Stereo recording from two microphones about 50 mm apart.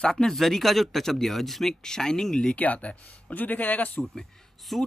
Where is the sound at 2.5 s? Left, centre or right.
Left.